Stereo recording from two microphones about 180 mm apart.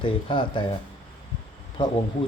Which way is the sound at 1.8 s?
25° left (ahead or behind).